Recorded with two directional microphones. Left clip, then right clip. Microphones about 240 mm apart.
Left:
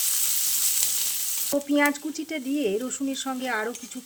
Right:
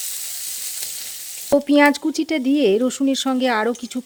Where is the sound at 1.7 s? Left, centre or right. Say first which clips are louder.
Right 7 dB; right.